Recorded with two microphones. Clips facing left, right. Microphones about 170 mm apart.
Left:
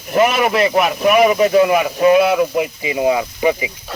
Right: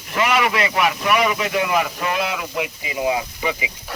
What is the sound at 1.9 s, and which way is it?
Speech, 40° left (ahead or behind).